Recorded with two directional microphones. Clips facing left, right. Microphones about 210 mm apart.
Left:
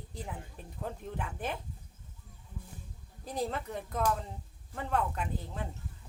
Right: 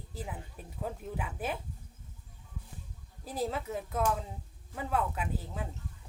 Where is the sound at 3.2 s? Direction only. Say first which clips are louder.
Right 1 dB; 5° right (ahead or behind).